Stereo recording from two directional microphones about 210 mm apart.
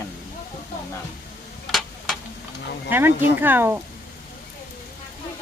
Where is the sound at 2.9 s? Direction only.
10° right (ahead or behind).